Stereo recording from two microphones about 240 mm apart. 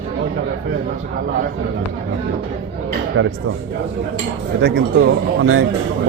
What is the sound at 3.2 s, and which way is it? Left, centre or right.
Speech, right.